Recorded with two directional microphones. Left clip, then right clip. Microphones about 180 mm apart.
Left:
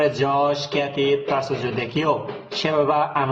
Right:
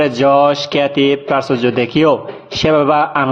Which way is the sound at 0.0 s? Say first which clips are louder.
Right 8 dB; 40° right (ahead or behind).